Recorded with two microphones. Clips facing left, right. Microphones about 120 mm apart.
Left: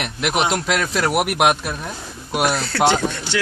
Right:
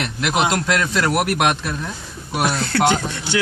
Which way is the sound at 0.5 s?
5° left (ahead or behind).